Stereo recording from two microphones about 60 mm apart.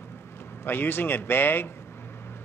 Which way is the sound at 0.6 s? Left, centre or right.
Left.